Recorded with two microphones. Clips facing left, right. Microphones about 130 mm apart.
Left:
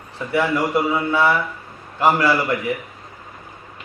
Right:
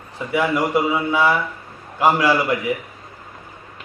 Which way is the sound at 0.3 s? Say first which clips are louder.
Even; 15° right (ahead or behind).